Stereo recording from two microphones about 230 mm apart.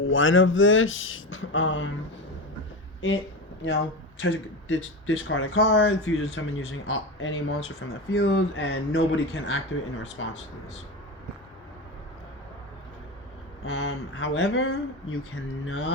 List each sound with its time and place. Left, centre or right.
0.0 s speech: left
3.0 s speech: left
7.9 s speech: left
13.7 s speech: left